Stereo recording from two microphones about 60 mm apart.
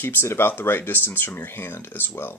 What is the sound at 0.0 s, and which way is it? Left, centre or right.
Speech, left.